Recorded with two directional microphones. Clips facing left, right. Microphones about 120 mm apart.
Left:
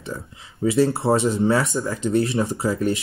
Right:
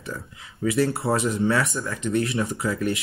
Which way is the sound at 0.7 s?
25° left (ahead or behind).